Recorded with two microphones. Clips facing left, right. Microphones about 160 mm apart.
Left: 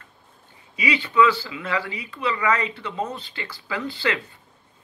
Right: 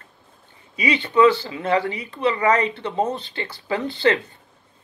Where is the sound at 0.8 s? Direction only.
25° right (ahead or behind).